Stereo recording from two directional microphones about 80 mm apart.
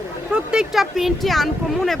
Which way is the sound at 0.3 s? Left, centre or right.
Centre.